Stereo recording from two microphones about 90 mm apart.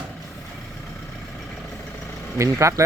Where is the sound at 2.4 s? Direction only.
40° right (ahead or behind).